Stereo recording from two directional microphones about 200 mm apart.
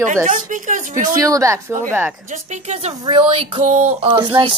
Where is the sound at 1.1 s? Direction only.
15° right (ahead or behind).